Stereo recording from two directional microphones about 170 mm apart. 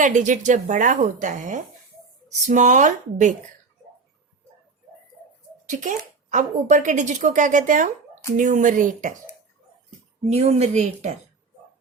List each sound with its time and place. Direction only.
0.0 s a woman's voice: 45° right (ahead or behind)
5.6 s a woman's voice: 45° right (ahead or behind)
10.2 s speech: 40° right (ahead or behind)